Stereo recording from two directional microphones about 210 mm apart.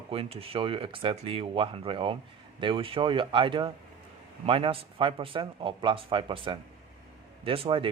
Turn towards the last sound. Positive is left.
turn(degrees=-25)  # may be behind; listen again after turning